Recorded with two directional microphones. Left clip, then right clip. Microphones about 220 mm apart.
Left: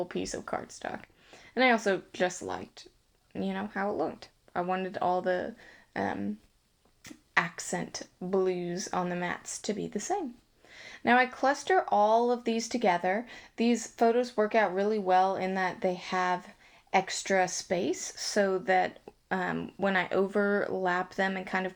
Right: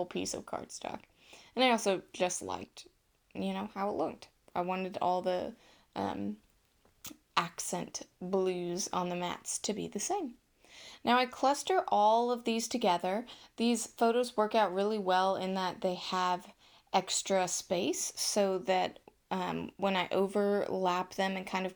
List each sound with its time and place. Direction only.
0.0 s speech: 20° right (ahead or behind)